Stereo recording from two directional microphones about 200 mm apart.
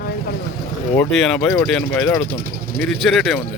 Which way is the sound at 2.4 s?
45° right (ahead or behind).